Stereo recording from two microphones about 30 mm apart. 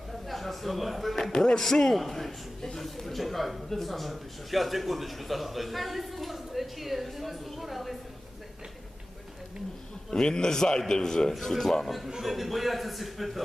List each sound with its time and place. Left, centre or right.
0.1 s a sound: centre
1.3 s a man's voice: left; by 7.9 s centre
10.1 s a man's voice: left
12.2 s a man's voice: centre